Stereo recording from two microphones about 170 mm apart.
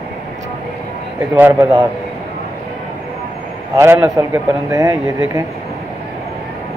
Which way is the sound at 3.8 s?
15° right (ahead or behind).